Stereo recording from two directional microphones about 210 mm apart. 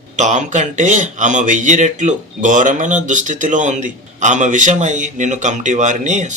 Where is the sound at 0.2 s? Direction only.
35° right (ahead or behind).